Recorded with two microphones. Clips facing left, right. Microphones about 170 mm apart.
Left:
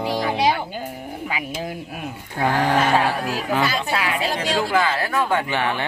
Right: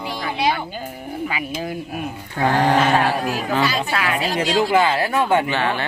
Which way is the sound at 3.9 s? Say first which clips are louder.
Right 1 dB; 25° left (ahead or behind).